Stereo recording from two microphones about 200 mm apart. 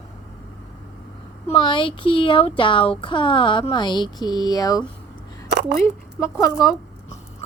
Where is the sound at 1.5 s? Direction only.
25° left (ahead or behind).